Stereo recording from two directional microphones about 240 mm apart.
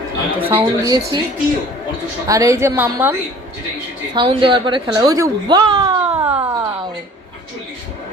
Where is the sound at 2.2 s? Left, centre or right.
Centre.